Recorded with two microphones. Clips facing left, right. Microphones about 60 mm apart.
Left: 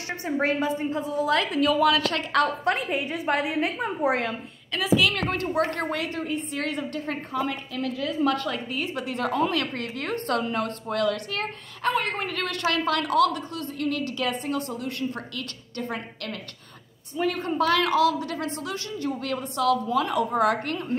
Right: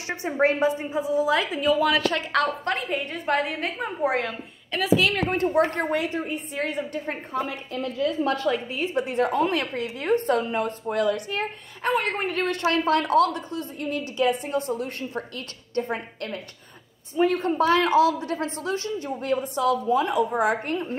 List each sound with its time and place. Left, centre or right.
0.1 s a woman's voice: right; by 4.4 s centre
4.7 s a woman's voice: right
8.5 s a woman's voice: right
18.9 s a woman's voice: right